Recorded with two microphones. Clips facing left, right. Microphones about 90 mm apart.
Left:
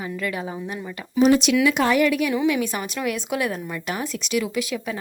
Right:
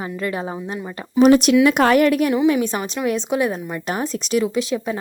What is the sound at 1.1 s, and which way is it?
Speech, 55° right (ahead or behind).